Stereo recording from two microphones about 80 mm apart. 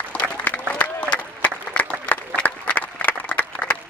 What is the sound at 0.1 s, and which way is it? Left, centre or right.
Applause, centre.